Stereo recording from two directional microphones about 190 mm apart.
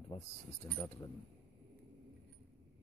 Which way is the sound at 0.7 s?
25° left (ahead or behind).